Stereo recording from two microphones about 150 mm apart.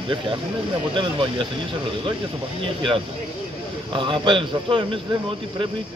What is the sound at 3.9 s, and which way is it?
Speech, 30° right (ahead or behind).